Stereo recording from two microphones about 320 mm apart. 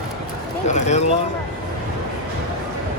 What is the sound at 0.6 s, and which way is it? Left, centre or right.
Speech, left.